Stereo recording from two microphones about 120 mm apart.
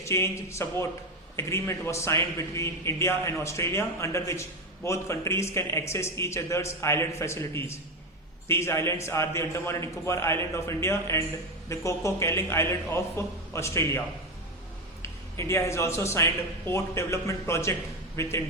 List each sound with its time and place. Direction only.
0.0 s a man's voice: 25° left (ahead or behind)
15.0 s a man's voice: 25° left (ahead or behind)